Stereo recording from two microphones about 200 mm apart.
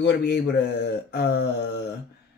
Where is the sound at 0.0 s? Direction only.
55° left (ahead or behind).